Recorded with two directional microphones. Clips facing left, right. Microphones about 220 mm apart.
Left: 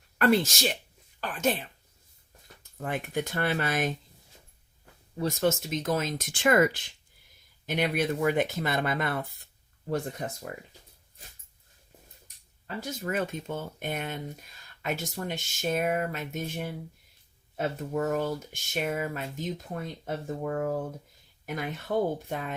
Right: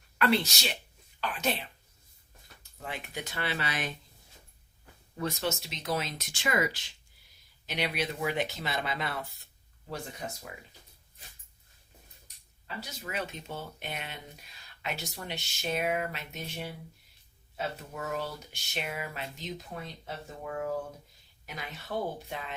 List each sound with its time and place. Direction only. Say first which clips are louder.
0.2 s speech: left 4 dB; 45° left (ahead or behind)
2.8 s speech: left 8 dB; 50° left (ahead or behind)
5.2 s speech: left 6 dB; 50° left (ahead or behind)
12.6 s speech: left 8 dB; 50° left (ahead or behind)